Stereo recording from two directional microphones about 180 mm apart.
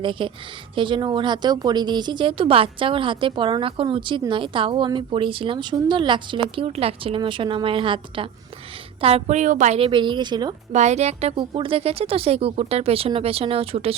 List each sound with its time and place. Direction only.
0.0 s a woman's voice: 30° right (ahead or behind)
10.7 s speech: 40° right (ahead or behind)